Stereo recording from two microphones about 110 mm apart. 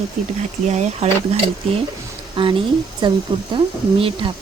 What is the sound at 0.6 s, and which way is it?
Speech, 90° right.